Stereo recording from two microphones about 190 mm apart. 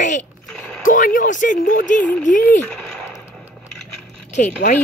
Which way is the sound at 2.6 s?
5° left (ahead or behind).